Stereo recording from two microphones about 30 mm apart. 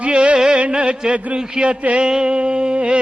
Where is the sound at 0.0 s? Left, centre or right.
Right.